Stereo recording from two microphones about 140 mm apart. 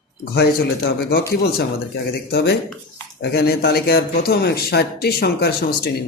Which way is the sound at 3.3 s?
90° left.